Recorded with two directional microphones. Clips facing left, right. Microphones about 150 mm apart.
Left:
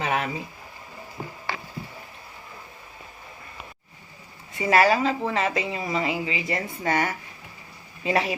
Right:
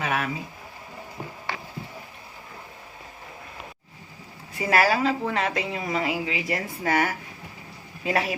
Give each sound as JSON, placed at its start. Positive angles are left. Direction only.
{"t": 0.0, "sound": "speech", "side_deg": 30}
{"t": 4.5, "sound": "a woman's voice", "side_deg": 0}